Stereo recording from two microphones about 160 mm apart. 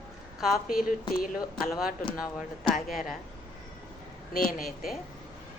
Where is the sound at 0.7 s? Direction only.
65° left (ahead or behind).